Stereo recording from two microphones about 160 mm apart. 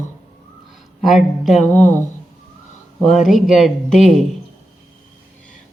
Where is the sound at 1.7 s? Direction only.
10° left (ahead or behind).